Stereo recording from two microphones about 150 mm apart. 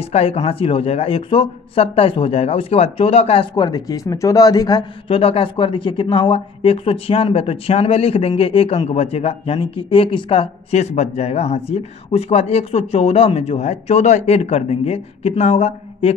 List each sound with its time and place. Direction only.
0.0 s speech: 40° left (ahead or behind)
3.5 s a man's voice: 25° left (ahead or behind)
5.1 s speech: 40° left (ahead or behind)